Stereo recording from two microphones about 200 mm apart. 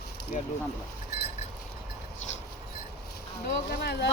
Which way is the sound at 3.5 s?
55° left (ahead or behind).